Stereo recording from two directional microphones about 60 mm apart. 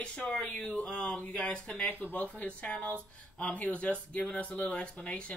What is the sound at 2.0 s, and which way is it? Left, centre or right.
Speech, left.